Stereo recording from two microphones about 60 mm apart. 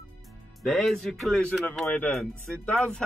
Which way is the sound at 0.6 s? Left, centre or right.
Centre.